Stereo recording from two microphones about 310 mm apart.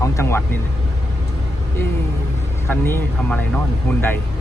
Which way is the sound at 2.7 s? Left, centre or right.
Centre.